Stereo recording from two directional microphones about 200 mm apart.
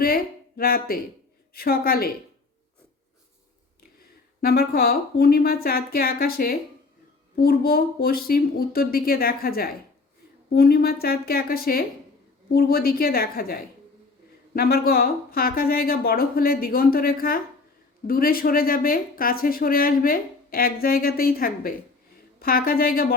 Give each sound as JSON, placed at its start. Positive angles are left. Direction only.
{"t": 0.0, "sound": "speech", "side_deg": 50}
{"t": 4.4, "sound": "speech", "side_deg": 50}